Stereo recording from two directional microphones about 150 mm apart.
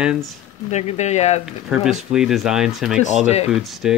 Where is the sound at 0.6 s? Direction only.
50° left (ahead or behind).